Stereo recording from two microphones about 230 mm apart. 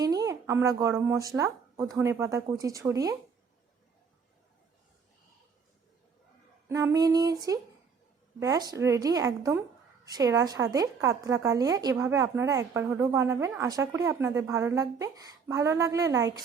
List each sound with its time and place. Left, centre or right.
0.0 s a woman's voice: centre
6.7 s a woman's voice: centre